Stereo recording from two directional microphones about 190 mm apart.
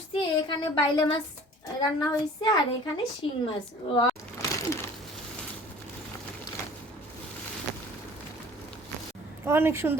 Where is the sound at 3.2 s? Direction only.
25° left (ahead or behind).